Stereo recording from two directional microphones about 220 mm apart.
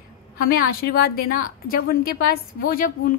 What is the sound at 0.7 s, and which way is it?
A woman's voice, 45° left (ahead or behind).